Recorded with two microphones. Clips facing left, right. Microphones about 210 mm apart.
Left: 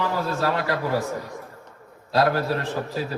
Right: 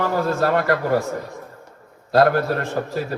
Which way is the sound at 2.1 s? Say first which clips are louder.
Right 5 dB; 55° right (ahead or behind).